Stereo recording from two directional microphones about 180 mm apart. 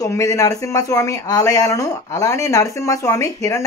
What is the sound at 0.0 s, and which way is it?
Speech, 15° left (ahead or behind).